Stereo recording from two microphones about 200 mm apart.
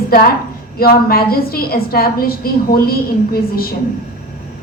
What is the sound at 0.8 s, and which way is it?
A woman's voice, 50° left (ahead or behind).